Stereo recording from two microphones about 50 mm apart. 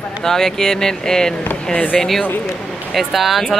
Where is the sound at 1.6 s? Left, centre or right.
Left.